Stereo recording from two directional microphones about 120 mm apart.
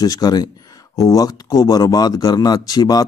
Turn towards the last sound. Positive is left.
turn(degrees=35)  # may be behind; listen again after turning